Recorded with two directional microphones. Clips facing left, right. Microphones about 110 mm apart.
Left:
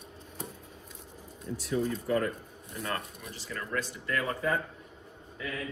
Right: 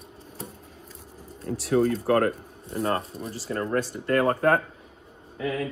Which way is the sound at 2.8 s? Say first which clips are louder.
Right 8 dB; 30° right (ahead or behind).